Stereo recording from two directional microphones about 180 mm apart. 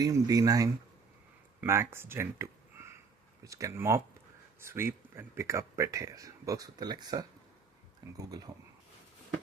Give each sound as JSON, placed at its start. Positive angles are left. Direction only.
{"t": 0.0, "sound": "speech", "side_deg": -20}